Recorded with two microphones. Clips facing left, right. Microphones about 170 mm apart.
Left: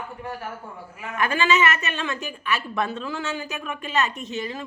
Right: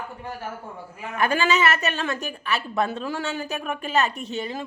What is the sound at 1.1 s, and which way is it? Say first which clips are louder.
A woman's voice: even; 35° right (ahead or behind).